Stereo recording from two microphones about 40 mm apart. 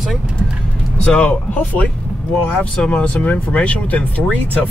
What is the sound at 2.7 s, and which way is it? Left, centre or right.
Speech, left.